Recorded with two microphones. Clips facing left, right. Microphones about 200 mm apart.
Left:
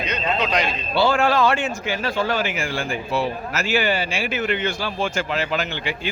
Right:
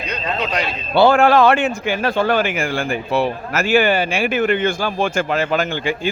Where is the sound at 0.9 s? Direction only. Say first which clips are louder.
Right 6 dB; 55° right (ahead or behind).